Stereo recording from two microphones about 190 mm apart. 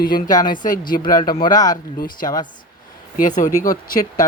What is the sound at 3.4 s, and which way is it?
Speech, 20° left (ahead or behind).